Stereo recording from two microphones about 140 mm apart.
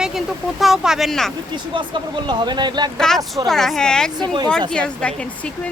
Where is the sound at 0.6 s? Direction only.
5° right (ahead or behind).